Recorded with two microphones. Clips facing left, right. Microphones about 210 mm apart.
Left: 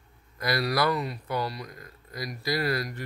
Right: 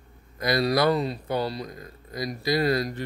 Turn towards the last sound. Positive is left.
turn(degrees=-25)  # may be behind; listen again after turning